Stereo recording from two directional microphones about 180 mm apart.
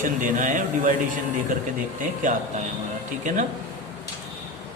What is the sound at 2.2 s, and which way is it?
A man's voice, 45° right (ahead or behind).